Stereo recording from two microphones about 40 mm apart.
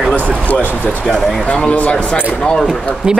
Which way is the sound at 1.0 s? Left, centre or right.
Centre.